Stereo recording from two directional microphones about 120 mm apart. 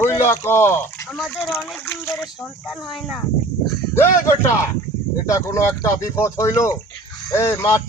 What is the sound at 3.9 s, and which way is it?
Speech, 20° left (ahead or behind).